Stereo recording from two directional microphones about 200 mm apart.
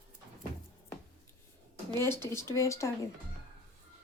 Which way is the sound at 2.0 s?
10° left (ahead or behind).